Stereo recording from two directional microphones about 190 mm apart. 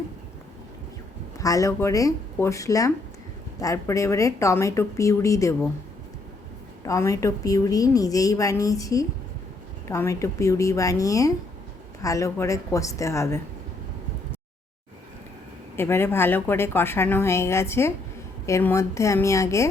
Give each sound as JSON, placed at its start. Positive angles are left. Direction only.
{"t": 1.4, "sound": "a woman's voice", "side_deg": 20}
{"t": 6.8, "sound": "a woman's voice", "side_deg": 15}
{"t": 15.7, "sound": "a woman's voice", "side_deg": 10}